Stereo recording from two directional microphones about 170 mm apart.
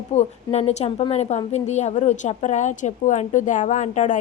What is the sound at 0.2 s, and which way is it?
A woman's voice, 40° left (ahead or behind).